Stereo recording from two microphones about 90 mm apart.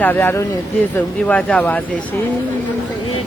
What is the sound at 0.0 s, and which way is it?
Speech, 20° left (ahead or behind).